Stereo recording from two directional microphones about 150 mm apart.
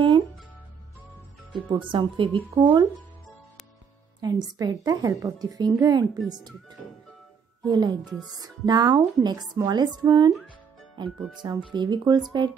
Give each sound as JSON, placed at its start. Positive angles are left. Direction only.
{"t": 1.5, "sound": "speech", "side_deg": -35}
{"t": 4.2, "sound": "speech", "side_deg": -25}
{"t": 7.6, "sound": "speech", "side_deg": -30}
{"t": 10.3, "sound": "music", "side_deg": 0}
{"t": 11.1, "sound": "speech", "side_deg": 0}
{"t": 11.6, "sound": "speech", "side_deg": -30}